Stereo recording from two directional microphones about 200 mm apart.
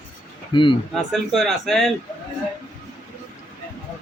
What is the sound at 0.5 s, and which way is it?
Speech, 25° left (ahead or behind).